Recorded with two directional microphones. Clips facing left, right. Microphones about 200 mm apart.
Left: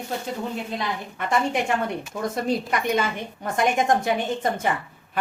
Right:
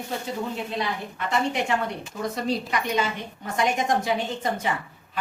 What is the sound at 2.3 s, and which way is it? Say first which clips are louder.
A woman's voice: left 2 dB; 50° left (ahead or behind).